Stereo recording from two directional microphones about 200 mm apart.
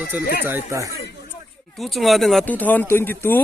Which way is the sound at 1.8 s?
Centre (ahead or behind).